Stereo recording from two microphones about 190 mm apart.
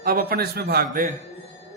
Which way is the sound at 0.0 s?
50° right (ahead or behind).